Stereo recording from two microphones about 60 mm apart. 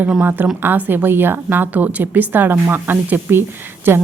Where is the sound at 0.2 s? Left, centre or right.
Right.